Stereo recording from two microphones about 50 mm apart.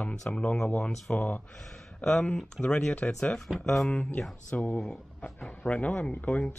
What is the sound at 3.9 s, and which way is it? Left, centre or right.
Speech, left.